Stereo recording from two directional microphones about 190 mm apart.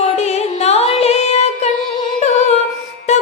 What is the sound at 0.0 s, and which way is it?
Music, 35° left (ahead or behind).